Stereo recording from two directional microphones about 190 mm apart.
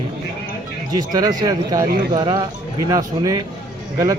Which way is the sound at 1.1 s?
20° right (ahead or behind).